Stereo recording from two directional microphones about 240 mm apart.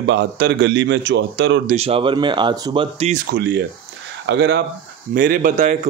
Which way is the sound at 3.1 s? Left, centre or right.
Right.